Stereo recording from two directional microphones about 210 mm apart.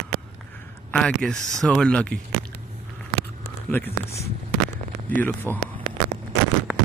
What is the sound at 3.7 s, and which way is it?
Speech, 10° left (ahead or behind).